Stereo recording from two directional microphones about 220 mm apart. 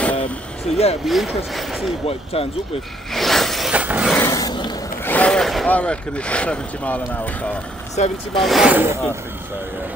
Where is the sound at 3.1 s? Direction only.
Centre (ahead or behind).